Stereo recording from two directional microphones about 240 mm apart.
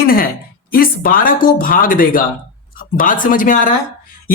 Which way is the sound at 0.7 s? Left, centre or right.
Left.